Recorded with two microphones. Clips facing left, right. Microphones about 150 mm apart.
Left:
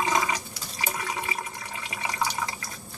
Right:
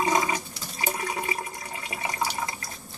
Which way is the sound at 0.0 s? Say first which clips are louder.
Right 2 dB; 35° right (ahead or behind).